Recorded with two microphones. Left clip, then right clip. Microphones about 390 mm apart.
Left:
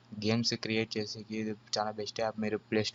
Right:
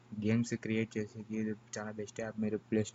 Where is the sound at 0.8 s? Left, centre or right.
Left.